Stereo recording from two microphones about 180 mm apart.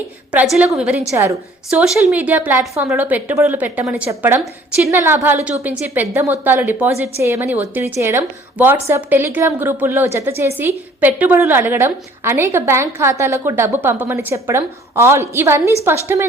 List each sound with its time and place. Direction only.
0.3 s a woman's voice: 5° right (ahead or behind)
1.1 s a woman's voice: 15° right (ahead or behind)
1.7 s a woman's voice: centre (ahead or behind)